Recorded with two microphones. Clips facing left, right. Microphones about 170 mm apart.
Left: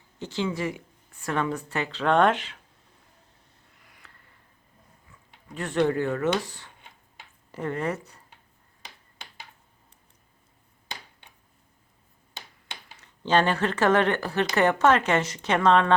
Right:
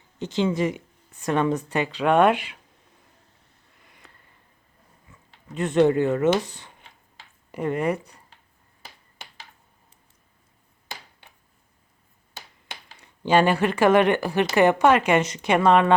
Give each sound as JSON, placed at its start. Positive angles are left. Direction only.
{"t": 0.2, "sound": "speech", "side_deg": -20}
{"t": 4.0, "sound": "a sound", "side_deg": -15}
{"t": 5.5, "sound": "speech", "side_deg": -20}
{"t": 13.0, "sound": "speech", "side_deg": -10}